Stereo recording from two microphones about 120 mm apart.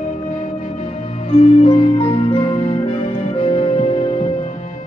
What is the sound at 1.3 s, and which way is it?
Music, 60° left (ahead or behind).